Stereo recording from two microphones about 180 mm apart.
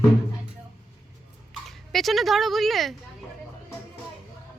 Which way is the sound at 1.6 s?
Centre (ahead or behind).